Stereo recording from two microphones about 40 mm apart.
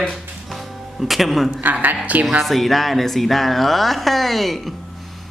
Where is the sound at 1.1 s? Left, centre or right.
Centre.